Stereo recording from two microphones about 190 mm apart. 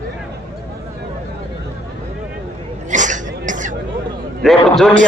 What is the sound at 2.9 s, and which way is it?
Throat clearing, 40° right (ahead or behind).